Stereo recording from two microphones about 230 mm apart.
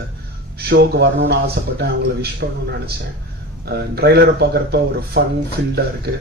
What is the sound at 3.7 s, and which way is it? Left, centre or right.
Speech, right.